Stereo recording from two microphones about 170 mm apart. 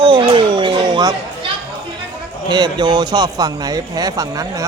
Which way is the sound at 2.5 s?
25° right (ahead or behind).